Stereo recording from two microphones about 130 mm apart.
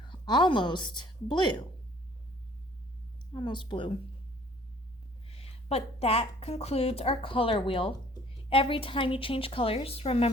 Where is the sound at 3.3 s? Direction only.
35° left (ahead or behind).